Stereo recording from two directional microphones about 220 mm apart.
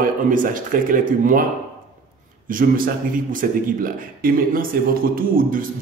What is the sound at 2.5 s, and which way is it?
A man's voice, 40° right (ahead or behind).